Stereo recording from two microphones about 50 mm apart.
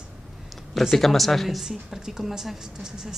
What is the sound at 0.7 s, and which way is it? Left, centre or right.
Speech, centre.